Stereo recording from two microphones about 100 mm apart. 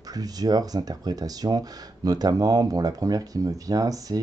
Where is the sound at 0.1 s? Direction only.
40° right (ahead or behind).